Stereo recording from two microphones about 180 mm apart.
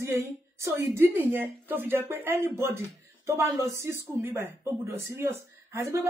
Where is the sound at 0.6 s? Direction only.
15° right (ahead or behind).